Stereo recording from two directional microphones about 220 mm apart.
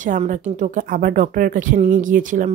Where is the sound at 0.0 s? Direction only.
35° right (ahead or behind).